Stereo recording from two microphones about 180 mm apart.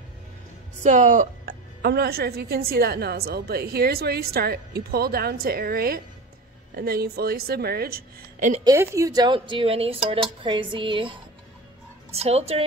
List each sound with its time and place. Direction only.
0.8 s speech: 45° right (ahead or behind)
1.8 s a woman's voice: 60° right (ahead or behind); by 8.6 s 45° right (ahead or behind)
8.6 s a woman's voice: 15° right (ahead or behind); by 12.6 s 35° right (ahead or behind)